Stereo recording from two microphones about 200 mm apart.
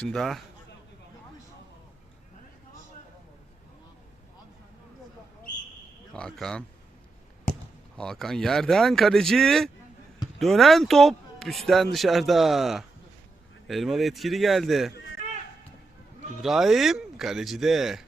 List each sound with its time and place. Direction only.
0.0 s speech: centre (ahead or behind)
6.1 s speech: 5° left (ahead or behind)
7.9 s speech: 5° left (ahead or behind)
16.4 s speech: centre (ahead or behind)